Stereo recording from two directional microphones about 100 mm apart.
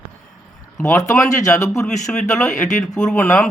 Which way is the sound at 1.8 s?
5° left (ahead or behind).